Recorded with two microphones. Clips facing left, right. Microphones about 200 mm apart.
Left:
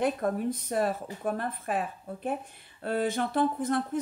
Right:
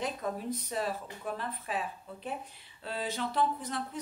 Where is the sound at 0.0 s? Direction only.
55° left (ahead or behind).